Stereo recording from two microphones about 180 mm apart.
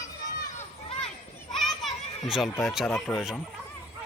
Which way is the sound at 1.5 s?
Centre (ahead or behind).